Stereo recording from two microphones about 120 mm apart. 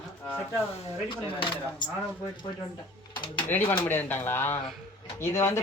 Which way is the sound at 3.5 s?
15° left (ahead or behind).